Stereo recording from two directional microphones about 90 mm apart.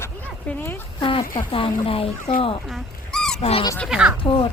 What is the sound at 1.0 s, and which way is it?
Speech, 70° left (ahead or behind).